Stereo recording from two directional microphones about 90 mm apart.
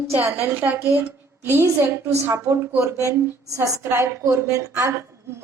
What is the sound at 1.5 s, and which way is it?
A woman's voice, 30° right (ahead or behind).